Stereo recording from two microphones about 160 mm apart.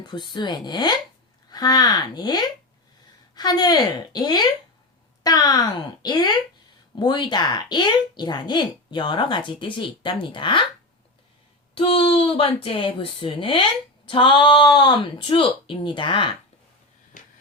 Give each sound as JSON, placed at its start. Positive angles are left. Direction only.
{"t": 0.0, "sound": "speech", "side_deg": 30}
{"t": 11.7, "sound": "speech", "side_deg": 35}